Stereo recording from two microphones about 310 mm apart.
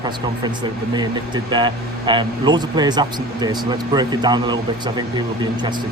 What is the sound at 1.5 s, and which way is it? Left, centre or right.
Speech, centre.